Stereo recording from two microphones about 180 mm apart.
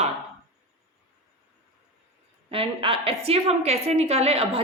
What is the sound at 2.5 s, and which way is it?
A woman's voice, 30° right (ahead or behind).